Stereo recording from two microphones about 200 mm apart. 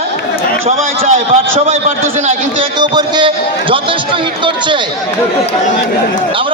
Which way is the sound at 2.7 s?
20° right (ahead or behind).